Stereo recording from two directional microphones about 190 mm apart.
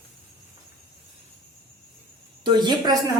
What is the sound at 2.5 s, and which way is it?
Speech, 20° right (ahead or behind).